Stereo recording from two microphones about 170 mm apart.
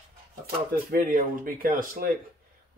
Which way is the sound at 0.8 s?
55° right (ahead or behind).